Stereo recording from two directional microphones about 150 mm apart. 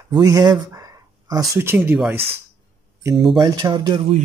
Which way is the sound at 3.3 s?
25° right (ahead or behind).